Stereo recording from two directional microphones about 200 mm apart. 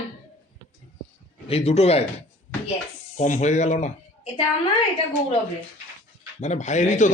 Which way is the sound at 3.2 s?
35° left (ahead or behind).